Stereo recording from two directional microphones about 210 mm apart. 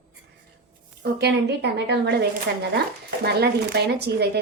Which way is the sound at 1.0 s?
55° right (ahead or behind).